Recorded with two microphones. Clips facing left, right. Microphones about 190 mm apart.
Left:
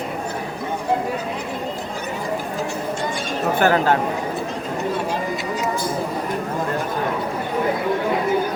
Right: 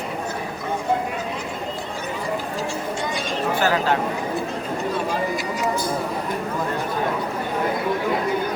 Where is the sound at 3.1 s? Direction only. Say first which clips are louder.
Even; 50° left (ahead or behind).